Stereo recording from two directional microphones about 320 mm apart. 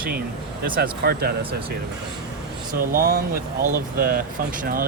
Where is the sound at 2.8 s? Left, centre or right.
Right.